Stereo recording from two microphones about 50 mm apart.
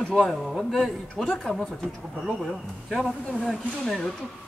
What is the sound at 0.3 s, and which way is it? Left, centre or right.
Speech, centre.